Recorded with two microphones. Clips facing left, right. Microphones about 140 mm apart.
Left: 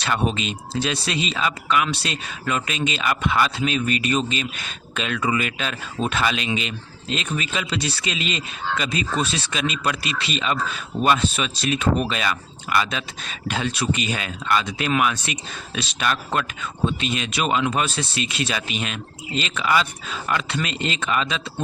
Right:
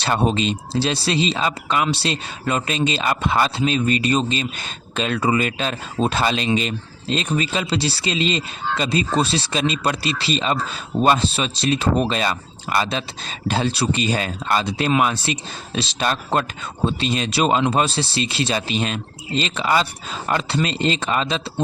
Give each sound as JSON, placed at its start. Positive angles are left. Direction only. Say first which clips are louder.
{"t": 0.0, "sound": "speech", "louder": "right 4 dB", "side_deg": -35}